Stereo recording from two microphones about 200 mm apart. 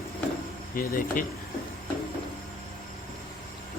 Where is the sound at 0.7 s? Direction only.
45° left (ahead or behind).